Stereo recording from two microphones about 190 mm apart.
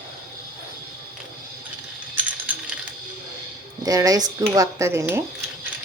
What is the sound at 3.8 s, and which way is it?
Speech, 20° right (ahead or behind).